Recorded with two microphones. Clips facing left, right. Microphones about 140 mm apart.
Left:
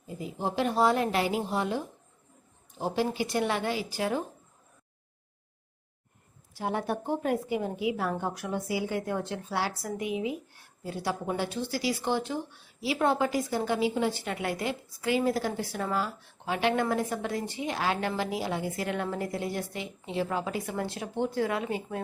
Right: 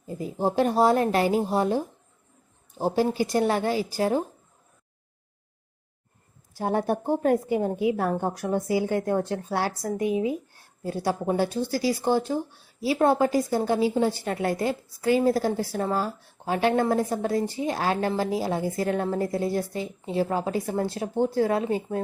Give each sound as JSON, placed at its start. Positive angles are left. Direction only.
{"t": 0.2, "sound": "a woman's voice", "side_deg": -40}
{"t": 6.6, "sound": "a woman's voice", "side_deg": -40}